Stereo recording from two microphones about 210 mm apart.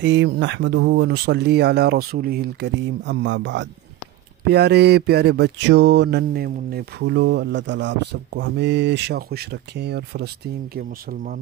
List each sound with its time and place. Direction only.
0.0 s mantra: 60° right (ahead or behind); by 11.3 s 45° right (ahead or behind)